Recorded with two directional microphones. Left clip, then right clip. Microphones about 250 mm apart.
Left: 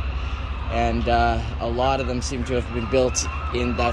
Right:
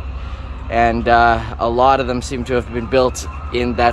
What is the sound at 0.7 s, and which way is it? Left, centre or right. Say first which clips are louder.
Speech: right 9 dB; centre.